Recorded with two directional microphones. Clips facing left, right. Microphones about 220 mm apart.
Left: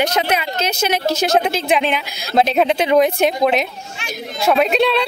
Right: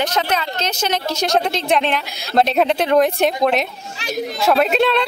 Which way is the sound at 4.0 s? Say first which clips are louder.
Right 4 dB; 35° right (ahead or behind).